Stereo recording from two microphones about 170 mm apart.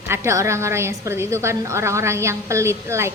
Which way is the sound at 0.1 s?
15° right (ahead or behind).